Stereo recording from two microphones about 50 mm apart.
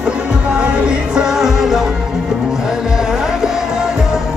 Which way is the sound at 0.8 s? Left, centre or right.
Centre.